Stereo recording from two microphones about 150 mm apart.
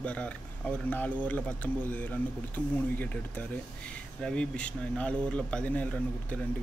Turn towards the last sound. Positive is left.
turn(degrees=10)  # may be behind; listen again after turning